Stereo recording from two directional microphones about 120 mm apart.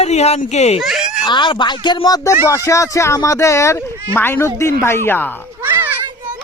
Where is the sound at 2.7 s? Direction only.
25° left (ahead or behind).